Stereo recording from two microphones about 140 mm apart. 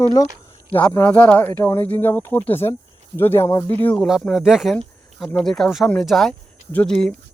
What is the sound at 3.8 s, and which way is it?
Speech, centre (ahead or behind).